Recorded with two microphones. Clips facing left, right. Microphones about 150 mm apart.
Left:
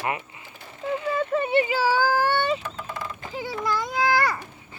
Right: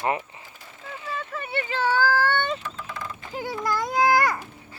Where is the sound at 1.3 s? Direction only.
20° left (ahead or behind).